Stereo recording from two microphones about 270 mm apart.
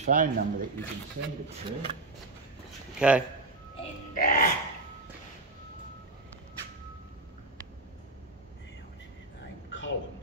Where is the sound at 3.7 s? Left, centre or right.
Left.